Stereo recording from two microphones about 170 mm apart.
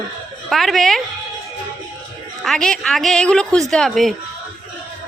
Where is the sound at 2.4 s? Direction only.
5° left (ahead or behind).